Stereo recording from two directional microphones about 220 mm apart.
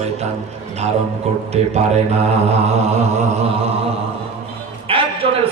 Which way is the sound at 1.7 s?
30° right (ahead or behind).